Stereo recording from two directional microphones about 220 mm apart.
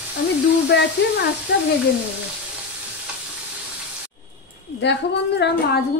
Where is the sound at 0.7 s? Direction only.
50° left (ahead or behind).